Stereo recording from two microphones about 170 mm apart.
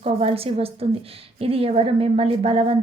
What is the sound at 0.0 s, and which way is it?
A woman's voice, 35° right (ahead or behind).